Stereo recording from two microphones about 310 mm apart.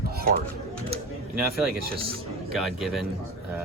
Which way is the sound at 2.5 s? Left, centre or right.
Centre.